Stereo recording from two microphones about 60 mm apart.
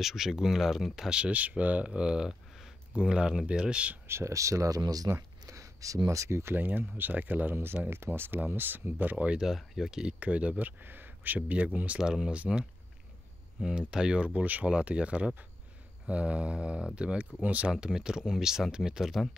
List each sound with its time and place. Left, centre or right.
0.0 s speech: centre
4.1 s speech: right
5.1 s speech: right
6.5 s speech: right
7.5 s speech: right
9.4 s speech: centre
10.2 s speech: right
12.0 s speech: centre
17.7 s speech: centre